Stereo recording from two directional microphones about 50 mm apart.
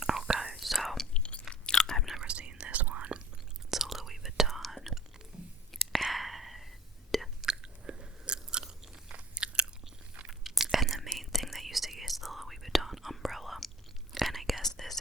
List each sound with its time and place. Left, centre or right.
0.0 s whispering: centre
1.1 s chewing: left
2.2 s whispering: right
3.7 s whispering: centre
5.3 s a sound: centre
5.7 s whispering: centre
7.4 s chewing: centre
10.4 s whispering: centre